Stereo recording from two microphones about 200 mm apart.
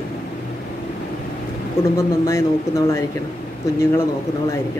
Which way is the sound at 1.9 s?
15° left (ahead or behind).